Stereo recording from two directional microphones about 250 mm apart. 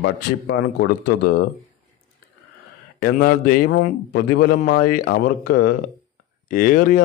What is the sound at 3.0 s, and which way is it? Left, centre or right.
Speech, left.